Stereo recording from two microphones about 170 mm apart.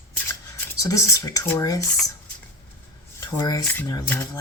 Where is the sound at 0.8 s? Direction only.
20° left (ahead or behind).